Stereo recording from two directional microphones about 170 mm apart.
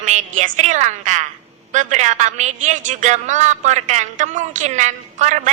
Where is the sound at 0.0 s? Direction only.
45° right (ahead or behind).